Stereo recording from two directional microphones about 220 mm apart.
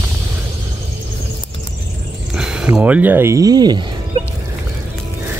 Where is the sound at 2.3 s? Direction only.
5° right (ahead or behind).